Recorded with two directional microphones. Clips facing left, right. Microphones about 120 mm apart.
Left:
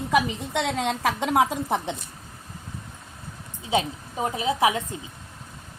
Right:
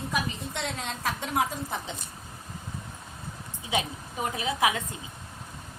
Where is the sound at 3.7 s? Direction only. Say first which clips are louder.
Left 5 dB; 25° left (ahead or behind).